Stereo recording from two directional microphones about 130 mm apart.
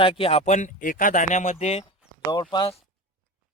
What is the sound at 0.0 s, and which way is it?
Speech, 45° left (ahead or behind).